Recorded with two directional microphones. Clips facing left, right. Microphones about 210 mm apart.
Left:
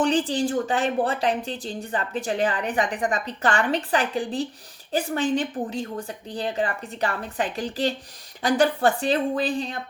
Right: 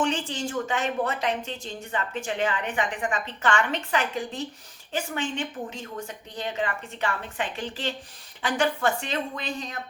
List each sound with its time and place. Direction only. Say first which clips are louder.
0.0 s speech: left 6 dB; 35° left (ahead or behind)